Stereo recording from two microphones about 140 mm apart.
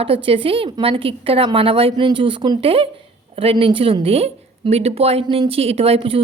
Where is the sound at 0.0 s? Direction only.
40° right (ahead or behind).